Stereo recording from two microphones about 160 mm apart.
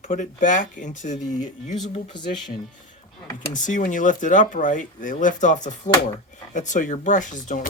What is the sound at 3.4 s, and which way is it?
Speech, 50° left (ahead or behind).